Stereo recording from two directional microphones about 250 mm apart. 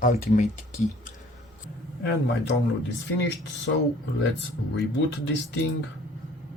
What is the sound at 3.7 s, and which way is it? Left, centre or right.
Speech, left.